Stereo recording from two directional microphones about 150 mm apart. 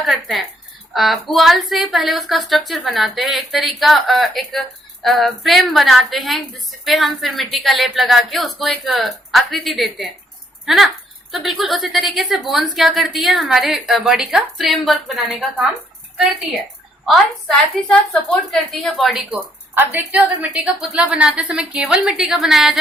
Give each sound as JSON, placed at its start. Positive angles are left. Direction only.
{"t": 0.0, "sound": "speech", "side_deg": 0}
{"t": 17.7, "sound": "speech", "side_deg": 5}